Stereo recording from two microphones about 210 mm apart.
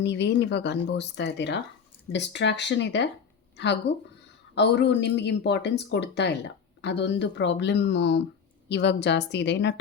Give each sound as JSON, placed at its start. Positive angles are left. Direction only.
{"t": 0.0, "sound": "speech", "side_deg": 55}